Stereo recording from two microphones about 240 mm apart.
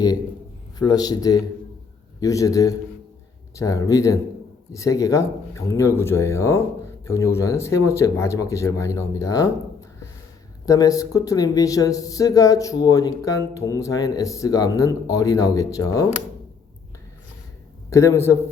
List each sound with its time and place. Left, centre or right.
0.8 s speech: centre
10.7 s speech: centre
17.9 s speech: centre